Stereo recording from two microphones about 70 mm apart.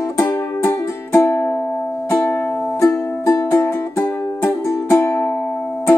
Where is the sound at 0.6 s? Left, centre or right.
Left.